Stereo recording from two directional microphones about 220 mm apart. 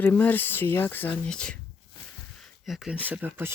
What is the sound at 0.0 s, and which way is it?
Speech, 10° left (ahead or behind).